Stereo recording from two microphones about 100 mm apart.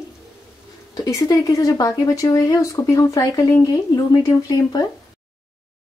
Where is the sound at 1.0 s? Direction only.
35° left (ahead or behind).